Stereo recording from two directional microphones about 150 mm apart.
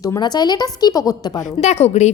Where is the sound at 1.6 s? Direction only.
50° left (ahead or behind).